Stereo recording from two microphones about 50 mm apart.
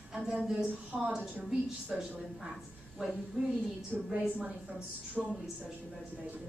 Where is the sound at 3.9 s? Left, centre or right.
Centre.